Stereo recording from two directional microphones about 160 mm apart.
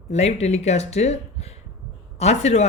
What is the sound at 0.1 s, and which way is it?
Speech, 45° left (ahead or behind).